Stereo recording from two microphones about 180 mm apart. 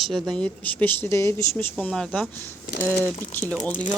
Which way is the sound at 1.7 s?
5° left (ahead or behind).